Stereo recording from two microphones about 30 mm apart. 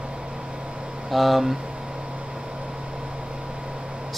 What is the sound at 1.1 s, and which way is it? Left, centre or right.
Speech, centre.